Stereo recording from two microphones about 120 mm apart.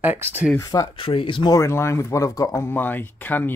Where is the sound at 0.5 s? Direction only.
30° left (ahead or behind).